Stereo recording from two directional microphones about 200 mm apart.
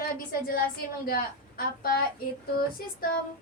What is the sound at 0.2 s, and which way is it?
Female singing, 45° left (ahead or behind).